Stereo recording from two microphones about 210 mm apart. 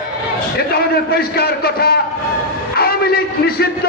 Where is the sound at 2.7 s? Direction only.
45° left (ahead or behind).